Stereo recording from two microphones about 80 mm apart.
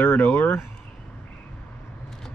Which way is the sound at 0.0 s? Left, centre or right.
Centre.